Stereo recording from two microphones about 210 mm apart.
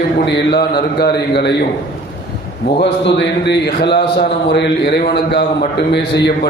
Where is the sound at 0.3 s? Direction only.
55° left (ahead or behind).